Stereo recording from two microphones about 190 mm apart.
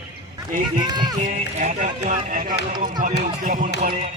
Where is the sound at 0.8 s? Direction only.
20° right (ahead or behind).